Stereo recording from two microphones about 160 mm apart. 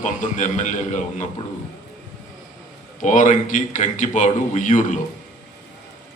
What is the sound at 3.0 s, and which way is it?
A man's voice, 50° left (ahead or behind).